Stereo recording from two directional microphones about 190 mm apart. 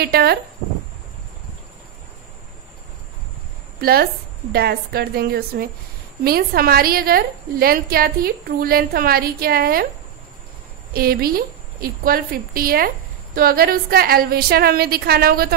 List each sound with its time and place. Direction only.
0.0 s a woman's voice: 55° right (ahead or behind)
3.8 s a woman's voice: 55° right (ahead or behind)
10.9 s a woman's voice: 50° right (ahead or behind)